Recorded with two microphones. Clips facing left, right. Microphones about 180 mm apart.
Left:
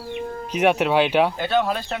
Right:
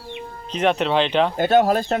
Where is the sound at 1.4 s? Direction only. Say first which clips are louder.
Right 5 dB; 45° right (ahead or behind).